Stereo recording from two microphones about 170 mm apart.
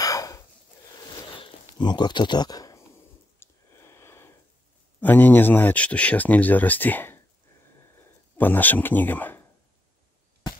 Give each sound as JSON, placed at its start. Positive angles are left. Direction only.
{"t": 0.0, "sound": "a sound", "side_deg": 20}
{"t": 5.0, "sound": "speech", "side_deg": 10}
{"t": 8.4, "sound": "speech", "side_deg": 10}